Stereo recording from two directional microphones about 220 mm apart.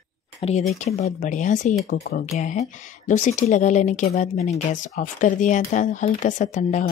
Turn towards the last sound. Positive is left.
turn(degrees=35)  # may be behind; listen again after turning